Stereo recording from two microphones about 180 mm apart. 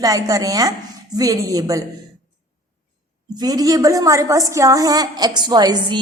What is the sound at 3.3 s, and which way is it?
A woman's voice, 20° right (ahead or behind).